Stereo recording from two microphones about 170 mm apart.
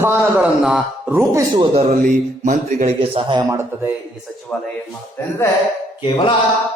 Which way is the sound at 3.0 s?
30° right (ahead or behind).